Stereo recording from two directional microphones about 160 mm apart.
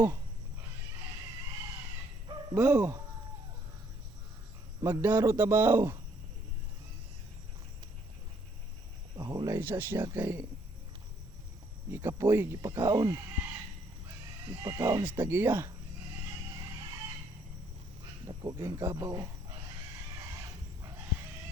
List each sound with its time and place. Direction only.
2.6 s speech: 10° right (ahead or behind)
4.8 s speech: 15° right (ahead or behind)
9.1 s speech: 25° right (ahead or behind)
11.9 s speech: 15° right (ahead or behind)
14.5 s speech: 20° right (ahead or behind)
18.5 s speech: 15° right (ahead or behind)